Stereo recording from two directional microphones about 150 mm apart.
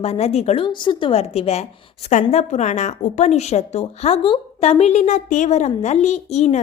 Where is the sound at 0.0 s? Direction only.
45° left (ahead or behind).